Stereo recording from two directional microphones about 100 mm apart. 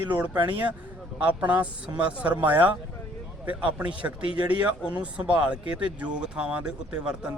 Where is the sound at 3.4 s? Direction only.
20° right (ahead or behind).